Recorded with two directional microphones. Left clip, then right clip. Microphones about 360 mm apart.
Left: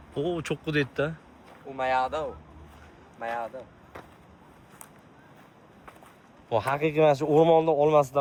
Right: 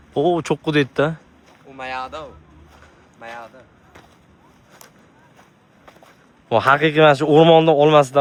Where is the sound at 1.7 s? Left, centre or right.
Centre.